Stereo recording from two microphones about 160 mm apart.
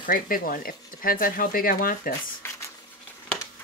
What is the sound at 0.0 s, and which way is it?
Speech, 60° left (ahead or behind).